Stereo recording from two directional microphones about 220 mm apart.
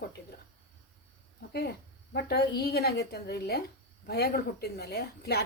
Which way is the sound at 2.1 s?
45° left (ahead or behind).